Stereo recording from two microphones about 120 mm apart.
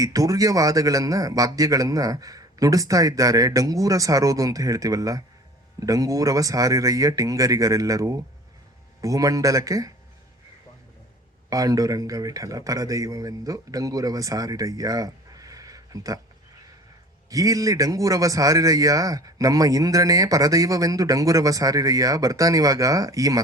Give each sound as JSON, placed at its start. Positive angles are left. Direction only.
{"t": 0.0, "sound": "a man's voice", "side_deg": -30}
{"t": 11.4, "sound": "a man's voice", "side_deg": -30}
{"t": 17.2, "sound": "a man's voice", "side_deg": -30}